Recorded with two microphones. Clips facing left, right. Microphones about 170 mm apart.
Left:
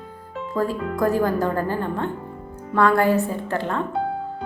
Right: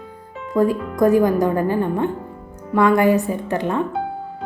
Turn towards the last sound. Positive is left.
turn(degrees=-15)  # may be behind; listen again after turning